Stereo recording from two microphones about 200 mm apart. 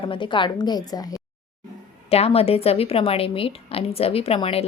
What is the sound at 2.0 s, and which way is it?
A woman's voice, 30° left (ahead or behind).